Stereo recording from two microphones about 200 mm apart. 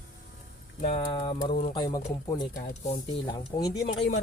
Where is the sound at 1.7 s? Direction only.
20° left (ahead or behind).